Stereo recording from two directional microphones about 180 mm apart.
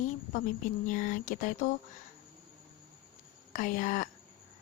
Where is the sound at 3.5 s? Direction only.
45° left (ahead or behind).